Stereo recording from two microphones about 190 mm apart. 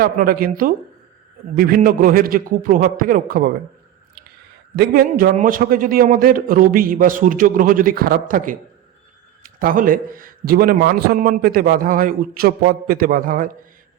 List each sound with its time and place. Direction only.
0.0 s a man's voice: 50° right (ahead or behind)
4.8 s a man's voice: 50° right (ahead or behind)